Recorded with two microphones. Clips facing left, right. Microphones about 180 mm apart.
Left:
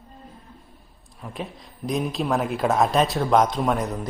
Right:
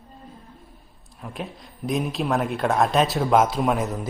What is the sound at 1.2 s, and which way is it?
A man's voice, centre (ahead or behind).